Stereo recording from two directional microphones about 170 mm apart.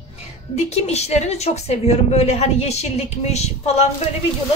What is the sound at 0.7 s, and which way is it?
A woman's voice, 40° left (ahead or behind).